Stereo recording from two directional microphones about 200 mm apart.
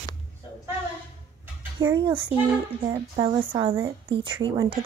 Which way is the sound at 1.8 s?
20° right (ahead or behind).